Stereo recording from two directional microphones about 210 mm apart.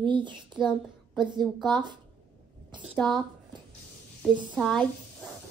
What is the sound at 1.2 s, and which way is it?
Speech, 20° right (ahead or behind).